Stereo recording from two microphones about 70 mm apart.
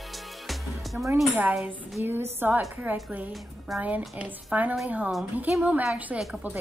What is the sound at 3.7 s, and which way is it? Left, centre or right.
Speech, centre.